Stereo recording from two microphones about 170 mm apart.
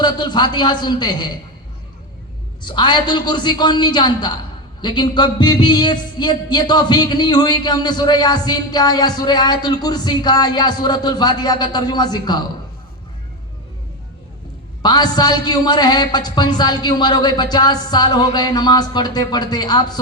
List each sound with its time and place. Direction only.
0.0 s speech: 25° left (ahead or behind)
2.6 s speech: 25° left (ahead or behind)
14.8 s speech: 25° left (ahead or behind)